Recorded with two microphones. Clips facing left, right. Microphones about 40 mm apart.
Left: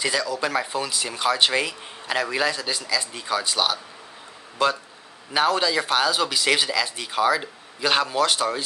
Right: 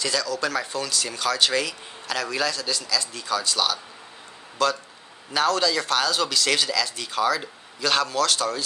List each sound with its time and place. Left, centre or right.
0.0 s speech: centre